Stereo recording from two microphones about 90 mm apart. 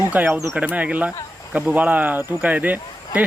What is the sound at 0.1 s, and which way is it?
Speech, 20° right (ahead or behind).